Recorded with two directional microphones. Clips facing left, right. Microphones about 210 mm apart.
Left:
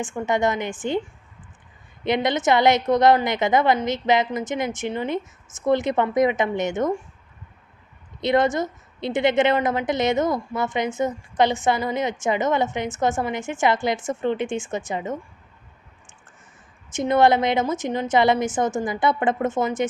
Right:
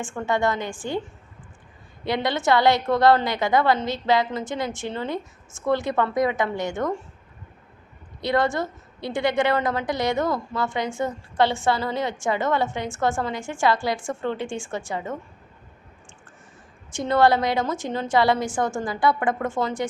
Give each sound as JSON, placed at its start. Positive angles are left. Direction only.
{"t": 0.0, "sound": "a woman's voice", "side_deg": 20}
{"t": 2.0, "sound": "a woman's voice", "side_deg": 20}
{"t": 8.2, "sound": "a woman's voice", "side_deg": 20}
{"t": 16.9, "sound": "a woman's voice", "side_deg": 20}